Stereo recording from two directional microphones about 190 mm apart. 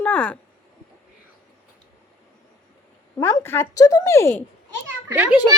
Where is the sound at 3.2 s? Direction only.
15° left (ahead or behind).